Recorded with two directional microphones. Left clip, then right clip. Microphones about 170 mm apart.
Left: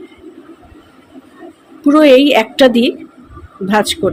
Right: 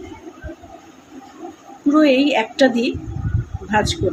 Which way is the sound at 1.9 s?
60° left (ahead or behind).